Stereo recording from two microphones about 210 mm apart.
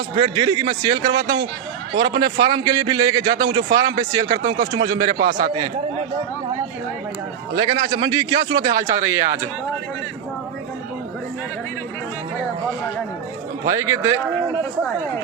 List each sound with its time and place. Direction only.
0.2 s a man's voice: 20° right (ahead or behind)
7.5 s a man's voice: 20° right (ahead or behind)
13.7 s speech: 15° right (ahead or behind)